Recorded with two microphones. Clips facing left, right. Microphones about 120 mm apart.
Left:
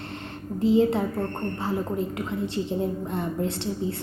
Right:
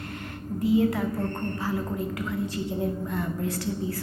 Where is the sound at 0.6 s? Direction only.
25° left (ahead or behind).